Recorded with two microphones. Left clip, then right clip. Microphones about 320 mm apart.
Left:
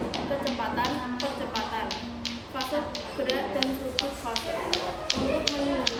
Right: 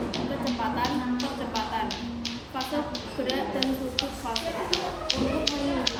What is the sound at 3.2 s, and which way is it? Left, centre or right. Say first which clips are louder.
Speech: even; centre.